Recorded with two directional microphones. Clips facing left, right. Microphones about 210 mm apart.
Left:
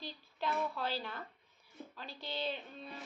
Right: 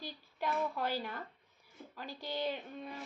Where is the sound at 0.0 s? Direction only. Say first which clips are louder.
Right 1 dB; 15° right (ahead or behind).